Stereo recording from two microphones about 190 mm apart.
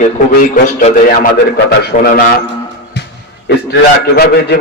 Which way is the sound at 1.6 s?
65° left (ahead or behind).